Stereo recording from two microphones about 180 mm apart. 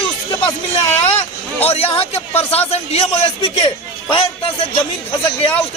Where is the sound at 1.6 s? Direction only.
35° left (ahead or behind).